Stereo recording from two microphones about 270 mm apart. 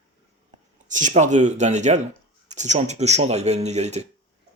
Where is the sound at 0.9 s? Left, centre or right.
Right.